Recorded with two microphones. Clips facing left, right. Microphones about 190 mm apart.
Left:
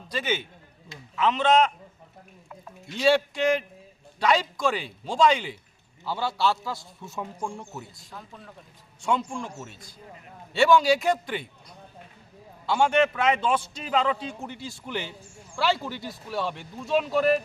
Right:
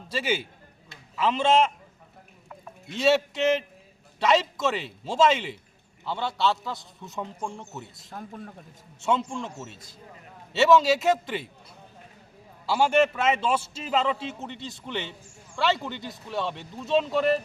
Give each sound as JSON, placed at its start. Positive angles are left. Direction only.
{"t": 0.1, "sound": "a man's voice", "side_deg": -10}
{"t": 1.5, "sound": "a man's voice", "side_deg": -10}
{"t": 2.9, "sound": "a man's voice", "side_deg": 0}
{"t": 8.1, "sound": "speech", "side_deg": -50}
{"t": 9.0, "sound": "a man's voice", "side_deg": 0}
{"t": 12.6, "sound": "a man's voice", "side_deg": -5}
{"t": 15.8, "sound": "speech", "side_deg": -20}
{"t": 16.3, "sound": "a man's voice", "side_deg": 0}